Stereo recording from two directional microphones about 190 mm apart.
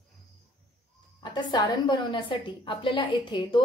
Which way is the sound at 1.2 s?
20° left (ahead or behind).